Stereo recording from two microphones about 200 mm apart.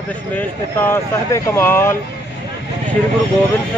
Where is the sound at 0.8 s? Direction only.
10° left (ahead or behind).